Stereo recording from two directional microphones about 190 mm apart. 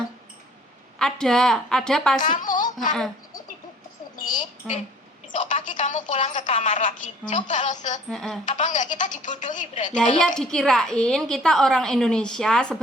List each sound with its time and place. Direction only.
0.9 s a woman's voice: 5° left (ahead or behind)
2.2 s speech: 45° left (ahead or behind)
4.2 s a sound: 45° left (ahead or behind)
4.7 s a woman's voice: 5° right (ahead or behind)
5.3 s speech: 40° left (ahead or behind)
8.1 s a woman's voice: centre (ahead or behind)
8.4 s speech: 40° left (ahead or behind)
10.3 s a woman's voice: 5° left (ahead or behind)